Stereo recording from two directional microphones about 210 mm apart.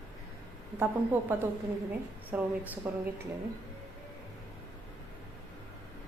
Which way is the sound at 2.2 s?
10° right (ahead or behind).